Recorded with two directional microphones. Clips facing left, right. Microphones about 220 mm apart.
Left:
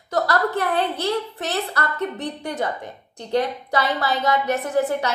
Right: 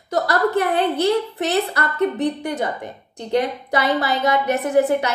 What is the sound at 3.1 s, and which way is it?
A woman's voice, 15° right (ahead or behind).